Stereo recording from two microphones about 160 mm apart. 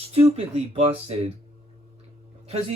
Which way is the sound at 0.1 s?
40° right (ahead or behind).